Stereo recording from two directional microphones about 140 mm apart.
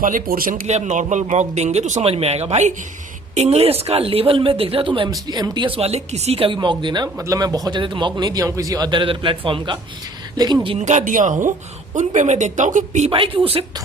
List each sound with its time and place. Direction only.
0.0 s speech: 85° right
0.7 s a woman's voice: 60° right (ahead or behind); by 10.8 s 35° right (ahead or behind)
10.8 s speech: 60° right (ahead or behind)
13.1 s speech: 40° right (ahead or behind)